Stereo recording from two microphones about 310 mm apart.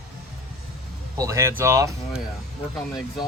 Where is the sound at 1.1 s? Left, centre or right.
Centre.